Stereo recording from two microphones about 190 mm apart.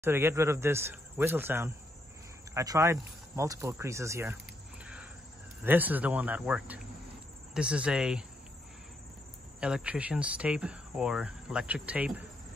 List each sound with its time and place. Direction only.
0.0 s speech: 10° right (ahead or behind)
4.8 s a sound: 5° right (ahead or behind)
5.6 s speech: 10° right (ahead or behind)
9.6 s speech: 5° right (ahead or behind)